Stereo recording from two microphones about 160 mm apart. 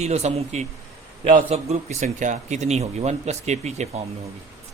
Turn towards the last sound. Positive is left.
turn(degrees=-45)  # may be behind; listen again after turning